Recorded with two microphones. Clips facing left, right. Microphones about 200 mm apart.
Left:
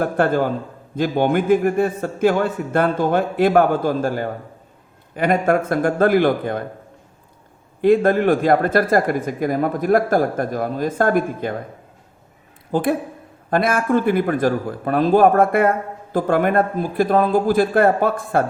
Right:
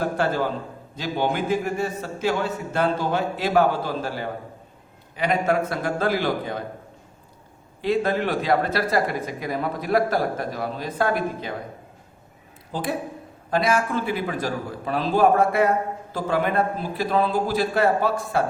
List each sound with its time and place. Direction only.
0.0 s speech: 55° left (ahead or behind)
7.8 s speech: 50° left (ahead or behind)
12.7 s speech: 55° left (ahead or behind)